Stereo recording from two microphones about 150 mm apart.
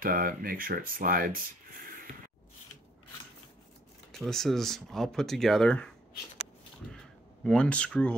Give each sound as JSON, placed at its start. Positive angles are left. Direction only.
{"t": 0.0, "sound": "speech", "side_deg": -70}
{"t": 4.1, "sound": "speech", "side_deg": 5}
{"t": 7.4, "sound": "speech", "side_deg": 5}